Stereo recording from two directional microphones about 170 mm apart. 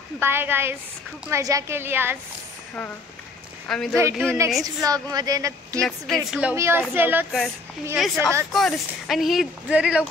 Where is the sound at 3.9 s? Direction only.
15° right (ahead or behind).